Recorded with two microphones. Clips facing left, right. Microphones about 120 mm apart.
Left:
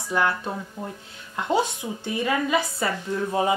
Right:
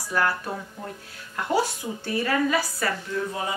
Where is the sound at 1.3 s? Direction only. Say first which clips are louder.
Left 1 dB; 20° left (ahead or behind).